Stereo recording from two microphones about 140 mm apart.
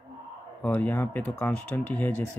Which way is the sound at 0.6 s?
15° left (ahead or behind).